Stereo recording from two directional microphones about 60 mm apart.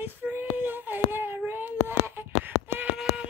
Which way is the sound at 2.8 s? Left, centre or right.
Centre.